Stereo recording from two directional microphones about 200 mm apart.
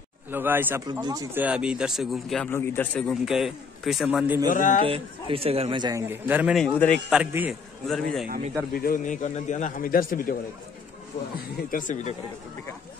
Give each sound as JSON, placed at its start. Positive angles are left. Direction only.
{"t": 0.3, "sound": "a man's voice", "side_deg": -10}
{"t": 4.5, "sound": "speech", "side_deg": 40}
{"t": 4.8, "sound": "a man's voice", "side_deg": -30}
{"t": 6.7, "sound": "a man's voice", "side_deg": 10}
{"t": 7.1, "sound": "a man's voice", "side_deg": -5}
{"t": 8.7, "sound": "a man's voice", "side_deg": 45}
{"t": 11.5, "sound": "speech", "side_deg": 40}